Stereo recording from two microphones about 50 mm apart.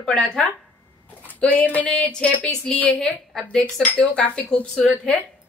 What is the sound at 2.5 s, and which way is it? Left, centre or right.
Speech, centre.